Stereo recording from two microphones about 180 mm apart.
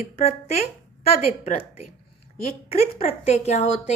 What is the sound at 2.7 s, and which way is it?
A woman's voice, 35° left (ahead or behind).